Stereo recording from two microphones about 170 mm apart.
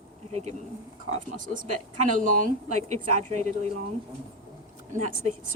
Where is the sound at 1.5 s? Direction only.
50° right (ahead or behind).